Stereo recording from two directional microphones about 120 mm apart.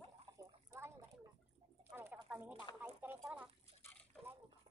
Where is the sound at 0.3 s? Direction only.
30° right (ahead or behind).